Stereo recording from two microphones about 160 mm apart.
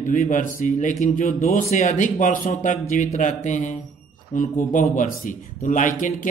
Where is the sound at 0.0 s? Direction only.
55° left (ahead or behind).